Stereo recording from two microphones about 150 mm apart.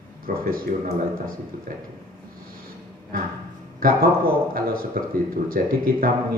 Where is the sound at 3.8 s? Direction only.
75° right (ahead or behind).